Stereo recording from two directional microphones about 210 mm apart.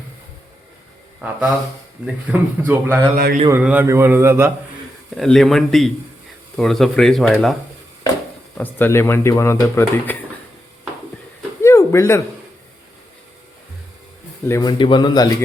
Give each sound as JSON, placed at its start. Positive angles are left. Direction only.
{"t": 2.0, "sound": "a man's voice", "side_deg": -10}
{"t": 3.2, "sound": "speech", "side_deg": -45}
{"t": 3.6, "sound": "a man's voice", "side_deg": -5}
{"t": 5.1, "sound": "speech", "side_deg": 0}
{"t": 8.5, "sound": "speech", "side_deg": 10}
{"t": 11.6, "sound": "a sound", "side_deg": 15}
{"t": 14.4, "sound": "a man's voice", "side_deg": 15}